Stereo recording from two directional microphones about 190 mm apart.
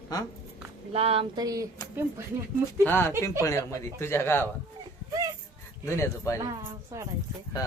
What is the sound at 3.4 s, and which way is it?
Speech, 15° left (ahead or behind).